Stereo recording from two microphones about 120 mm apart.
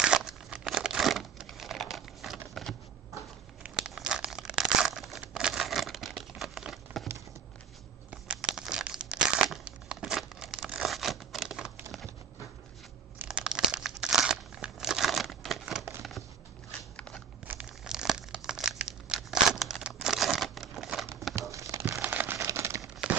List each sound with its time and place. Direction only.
0.0 s crumpling: 5° right (ahead or behind)
3.7 s crumpling: centre (ahead or behind)
8.1 s crumpling: 5° right (ahead or behind)
13.2 s crumpling: 5° right (ahead or behind)
16.0 s a sound: centre (ahead or behind)
17.5 s crumpling: 15° right (ahead or behind)
21.4 s crumpling: 25° right (ahead or behind)
22.0 s a sound: 15° right (ahead or behind)
22.5 s crumpling: 25° right (ahead or behind)
22.8 s crumpling: 5° right (ahead or behind)